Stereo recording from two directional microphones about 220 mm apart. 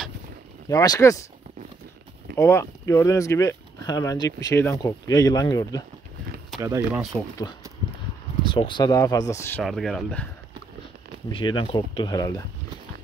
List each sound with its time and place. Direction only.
0.7 s speech: 15° left (ahead or behind)
2.3 s speech: 10° left (ahead or behind)
6.6 s speech: 15° right (ahead or behind)
7.0 s speech: centre (ahead or behind)
8.5 s speech: 20° left (ahead or behind)
9.6 s speech: centre (ahead or behind)
11.2 s speech: 20° left (ahead or behind)